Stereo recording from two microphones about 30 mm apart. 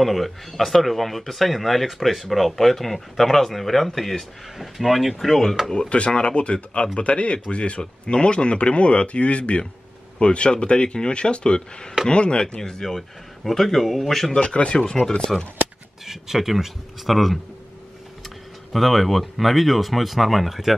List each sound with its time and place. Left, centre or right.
0.0 s speech: centre
4.6 s speech: centre
5.8 s speech: left
12.6 s speech: left
12.9 s a man's voice: centre
14.3 s speech: left
16.1 s speech: centre
18.7 s speech: centre